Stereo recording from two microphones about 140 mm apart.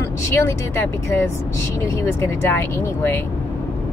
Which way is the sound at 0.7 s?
20° left (ahead or behind).